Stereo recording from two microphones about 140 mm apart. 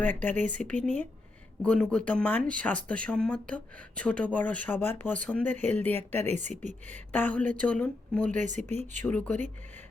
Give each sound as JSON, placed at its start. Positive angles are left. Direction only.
{"t": 0.0, "sound": "speech", "side_deg": 10}
{"t": 6.2, "sound": "speech", "side_deg": -55}
{"t": 7.1, "sound": "speech", "side_deg": 10}
{"t": 8.3, "sound": "speech", "side_deg": -65}
{"t": 9.0, "sound": "speech", "side_deg": 10}